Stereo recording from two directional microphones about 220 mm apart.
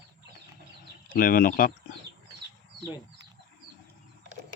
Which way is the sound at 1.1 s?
40° left (ahead or behind).